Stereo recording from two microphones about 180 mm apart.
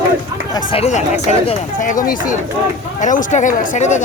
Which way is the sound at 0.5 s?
30° left (ahead or behind).